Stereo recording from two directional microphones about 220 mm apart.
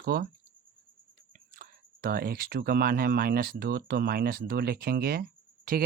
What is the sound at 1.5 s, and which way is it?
Speech, 40° right (ahead or behind).